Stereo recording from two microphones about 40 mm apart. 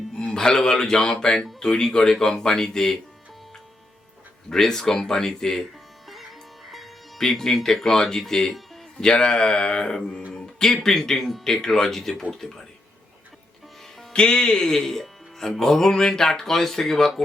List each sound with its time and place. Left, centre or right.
0.3 s speech: centre
4.4 s speech: centre
6.7 s speech: centre; by 10.2 s left
10.3 s speech: centre
14.1 s speech: left
14.6 s speech: centre